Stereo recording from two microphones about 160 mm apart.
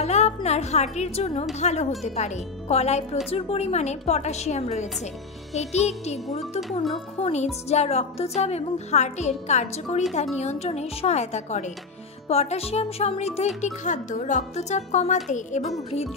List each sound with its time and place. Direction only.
0.0 s music: 45° left (ahead or behind)
1.5 s a woman's voice: 45° left (ahead or behind)
7.2 s a woman's voice: 40° left (ahead or behind)